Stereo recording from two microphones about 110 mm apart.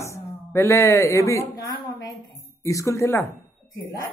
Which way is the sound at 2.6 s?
30° left (ahead or behind).